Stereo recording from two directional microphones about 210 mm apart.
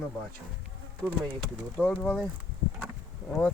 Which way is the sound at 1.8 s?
5° left (ahead or behind).